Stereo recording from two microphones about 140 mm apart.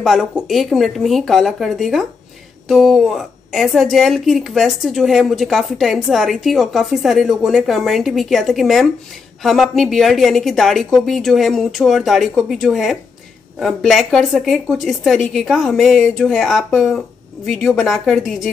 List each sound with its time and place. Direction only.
0.0 s a woman's voice: centre (ahead or behind)